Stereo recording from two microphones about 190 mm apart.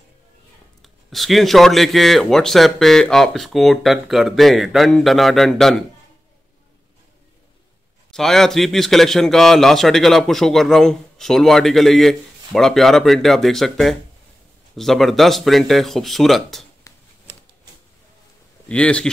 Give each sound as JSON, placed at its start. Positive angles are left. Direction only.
{"t": 0.8, "sound": "a man's voice", "side_deg": 0}
{"t": 8.1, "sound": "a man's voice", "side_deg": 0}
{"t": 16.9, "sound": "a sound", "side_deg": 20}
{"t": 18.7, "sound": "a man's voice", "side_deg": 5}